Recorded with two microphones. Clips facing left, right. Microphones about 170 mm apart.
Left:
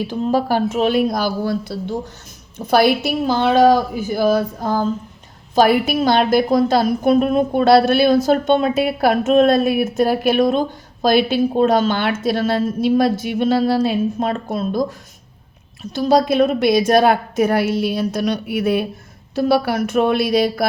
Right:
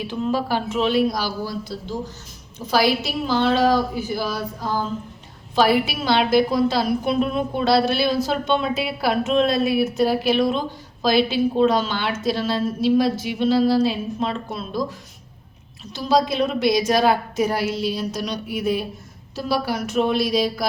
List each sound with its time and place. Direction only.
0.1 s a woman's voice: 40° left (ahead or behind)
16.0 s a woman's voice: 50° left (ahead or behind)